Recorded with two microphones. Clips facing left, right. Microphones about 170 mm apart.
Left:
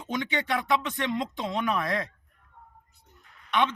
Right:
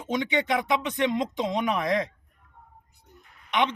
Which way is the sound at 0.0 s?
20° right (ahead or behind).